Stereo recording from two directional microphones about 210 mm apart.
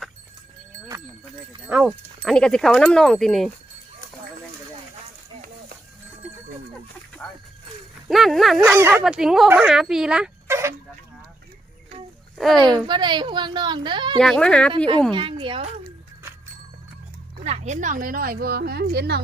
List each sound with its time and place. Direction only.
1.6 s speech: 5° right (ahead or behind)
7.2 s speech: 10° left (ahead or behind)
8.0 s speech: centre (ahead or behind)
8.6 s speech: 10° right (ahead or behind)
12.4 s speech: centre (ahead or behind)
12.9 s a woman's voice: 20° right (ahead or behind)
14.2 s speech: 5° left (ahead or behind)
15.1 s a woman's voice: 25° right (ahead or behind)
17.4 s a woman's voice: 30° right (ahead or behind); by 19.2 s 50° right (ahead or behind)